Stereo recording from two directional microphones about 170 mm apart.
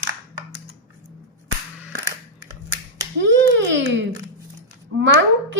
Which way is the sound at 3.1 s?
90° right.